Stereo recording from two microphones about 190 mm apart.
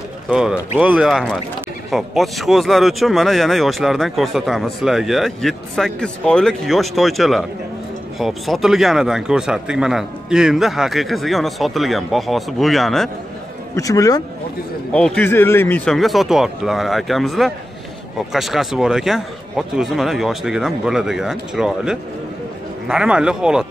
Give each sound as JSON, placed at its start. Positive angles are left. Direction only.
{"t": 0.3, "sound": "speech", "side_deg": -5}
{"t": 13.7, "sound": "speech", "side_deg": 15}
{"t": 14.9, "sound": "speech", "side_deg": 5}